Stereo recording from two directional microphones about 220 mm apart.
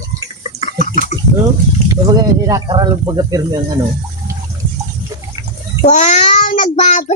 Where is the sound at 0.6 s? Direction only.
35° left (ahead or behind).